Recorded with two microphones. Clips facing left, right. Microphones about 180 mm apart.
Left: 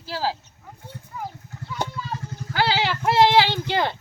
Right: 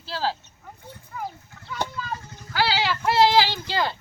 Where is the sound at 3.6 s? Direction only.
20° left (ahead or behind).